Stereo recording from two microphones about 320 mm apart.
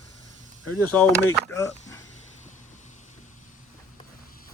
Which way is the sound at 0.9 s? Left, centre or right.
Centre.